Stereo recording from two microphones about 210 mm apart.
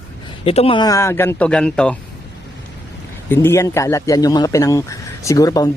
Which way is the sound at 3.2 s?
10° left (ahead or behind).